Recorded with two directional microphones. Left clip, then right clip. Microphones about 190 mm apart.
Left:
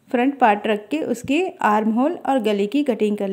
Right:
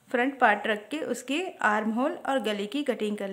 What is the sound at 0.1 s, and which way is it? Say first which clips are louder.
Speech: left 6 dB; 15° left (ahead or behind).